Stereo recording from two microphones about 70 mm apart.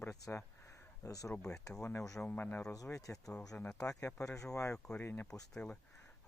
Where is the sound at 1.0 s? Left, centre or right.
Left.